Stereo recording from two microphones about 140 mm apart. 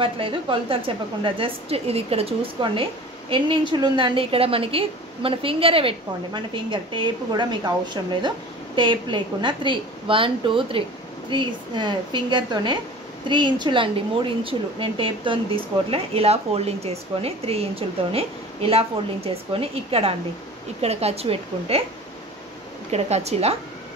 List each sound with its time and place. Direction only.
0.0 s a woman's voice: 35° right (ahead or behind)
22.8 s a woman's voice: 50° right (ahead or behind)